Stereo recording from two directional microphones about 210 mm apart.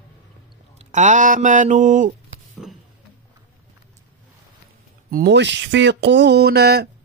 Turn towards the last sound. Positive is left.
turn(degrees=-50)  # may be behind; listen again after turning